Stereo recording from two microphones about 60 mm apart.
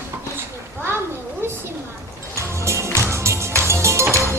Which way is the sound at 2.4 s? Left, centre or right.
Right.